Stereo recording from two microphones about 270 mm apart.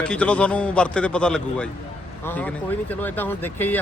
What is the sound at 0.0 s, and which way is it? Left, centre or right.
A man's voice, centre.